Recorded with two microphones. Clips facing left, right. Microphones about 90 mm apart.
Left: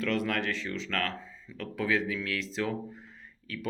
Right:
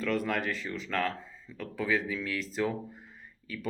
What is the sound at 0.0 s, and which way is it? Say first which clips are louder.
Speech: even; centre (ahead or behind).